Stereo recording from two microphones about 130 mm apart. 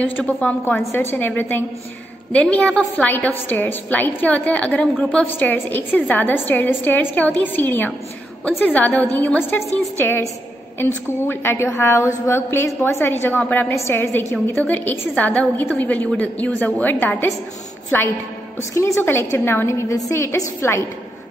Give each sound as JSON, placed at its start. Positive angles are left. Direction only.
{"t": 0.2, "sound": "a woman's voice", "side_deg": 10}
{"t": 18.6, "sound": "a woman's voice", "side_deg": 20}